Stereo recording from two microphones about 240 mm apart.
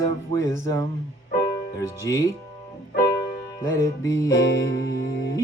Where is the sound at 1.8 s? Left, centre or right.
Centre.